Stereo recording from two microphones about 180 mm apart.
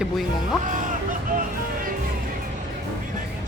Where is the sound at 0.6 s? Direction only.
45° right (ahead or behind).